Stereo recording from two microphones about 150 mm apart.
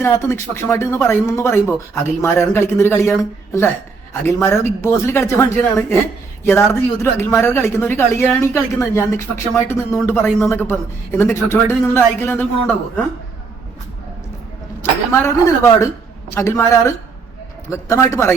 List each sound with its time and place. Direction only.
0.0 s speech: 15° left (ahead or behind)
7.0 s speech: 15° left (ahead or behind)
14.8 s speech: 15° left (ahead or behind)